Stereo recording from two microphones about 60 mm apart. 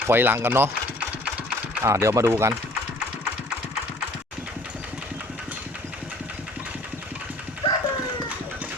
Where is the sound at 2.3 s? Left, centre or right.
Right.